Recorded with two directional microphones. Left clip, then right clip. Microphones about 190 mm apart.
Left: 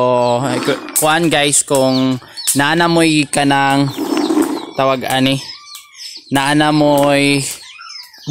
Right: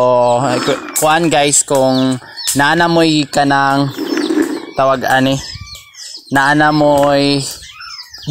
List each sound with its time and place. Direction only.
0.0 s a sound: centre (ahead or behind)
0.9 s speech: 10° left (ahead or behind)
3.9 s pigeon: 25° left (ahead or behind)
4.7 s speech: 5° left (ahead or behind)